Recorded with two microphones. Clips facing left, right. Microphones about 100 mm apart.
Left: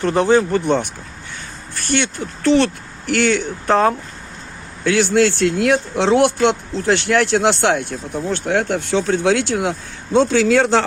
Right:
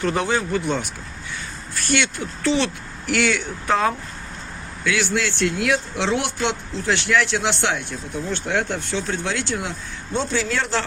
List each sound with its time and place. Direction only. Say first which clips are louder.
0.0 s speech: left 7 dB; 35° left (ahead or behind)
1.7 s speech: left 2 dB; 40° left (ahead or behind); by 9.7 s 60° left (ahead or behind)
10.2 s a man's voice: left 10 dB; 85° left